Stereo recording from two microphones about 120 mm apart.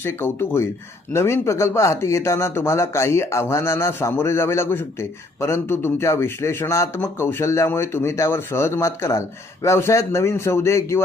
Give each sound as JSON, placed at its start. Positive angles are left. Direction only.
{"t": 0.0, "sound": "a man's voice", "side_deg": 20}